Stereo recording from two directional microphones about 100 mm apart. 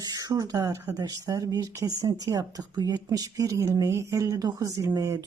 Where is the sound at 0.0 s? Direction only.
35° right (ahead or behind).